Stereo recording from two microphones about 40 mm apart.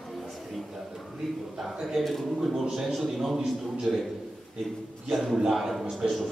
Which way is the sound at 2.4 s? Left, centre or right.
Centre.